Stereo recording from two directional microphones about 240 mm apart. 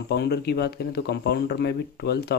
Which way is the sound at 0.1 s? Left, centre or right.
Left.